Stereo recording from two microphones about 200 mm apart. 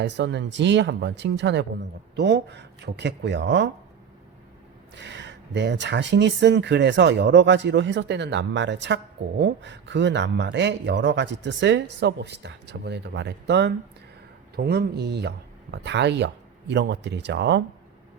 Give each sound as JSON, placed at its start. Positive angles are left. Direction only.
{"t": 0.0, "sound": "speech", "side_deg": -60}
{"t": 4.9, "sound": "speech", "side_deg": -60}